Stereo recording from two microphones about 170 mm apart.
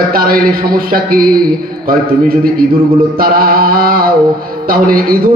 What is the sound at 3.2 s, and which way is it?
A man's voice, 60° right (ahead or behind).